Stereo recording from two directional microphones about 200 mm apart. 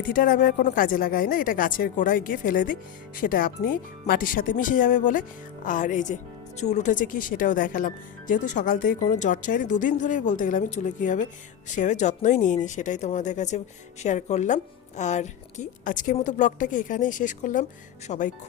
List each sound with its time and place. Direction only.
0.0 s a woman's voice: 45° left (ahead or behind)